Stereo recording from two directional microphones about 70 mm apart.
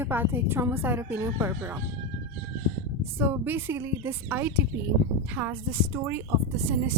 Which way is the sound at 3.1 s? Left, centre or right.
Right.